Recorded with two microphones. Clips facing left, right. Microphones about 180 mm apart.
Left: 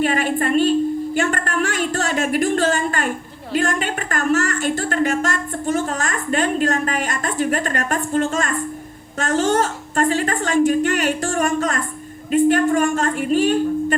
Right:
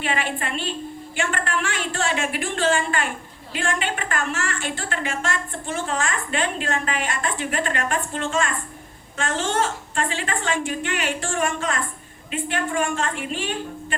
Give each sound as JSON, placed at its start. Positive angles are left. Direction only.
{"t": 0.0, "sound": "a woman's voice", "side_deg": 45}